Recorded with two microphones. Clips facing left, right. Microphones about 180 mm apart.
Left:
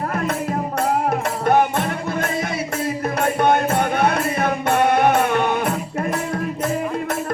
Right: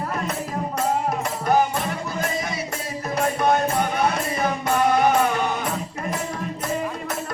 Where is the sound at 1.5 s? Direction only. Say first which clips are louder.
Left 3 dB; 55° left (ahead or behind).